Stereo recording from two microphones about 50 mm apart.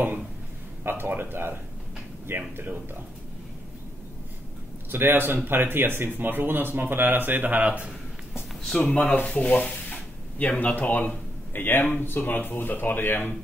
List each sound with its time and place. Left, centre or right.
0.8 s speech: right
4.9 s speech: right
8.9 s speech: left
9.2 s a sound: centre
10.6 s speech: left